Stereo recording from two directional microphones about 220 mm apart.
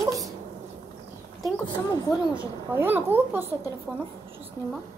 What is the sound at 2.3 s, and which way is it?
A child's voice, 10° right (ahead or behind).